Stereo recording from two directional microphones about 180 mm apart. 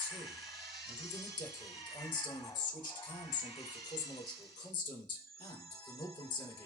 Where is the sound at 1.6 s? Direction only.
25° left (ahead or behind).